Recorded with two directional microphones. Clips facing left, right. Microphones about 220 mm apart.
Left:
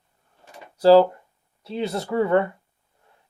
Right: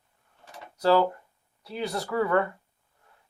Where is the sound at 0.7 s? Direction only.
30° left (ahead or behind).